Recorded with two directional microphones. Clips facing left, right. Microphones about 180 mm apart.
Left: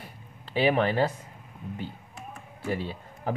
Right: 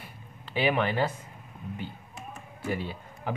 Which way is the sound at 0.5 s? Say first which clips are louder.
Left 3 dB; 35° left (ahead or behind).